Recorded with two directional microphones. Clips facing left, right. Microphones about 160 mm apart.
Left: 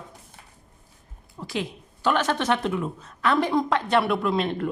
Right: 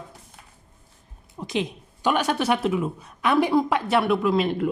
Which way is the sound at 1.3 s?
20° right (ahead or behind).